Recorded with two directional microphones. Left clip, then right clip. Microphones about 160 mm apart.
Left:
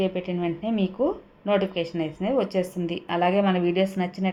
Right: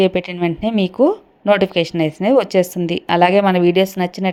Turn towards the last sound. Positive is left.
turn(degrees=-40)  # may be behind; listen again after turning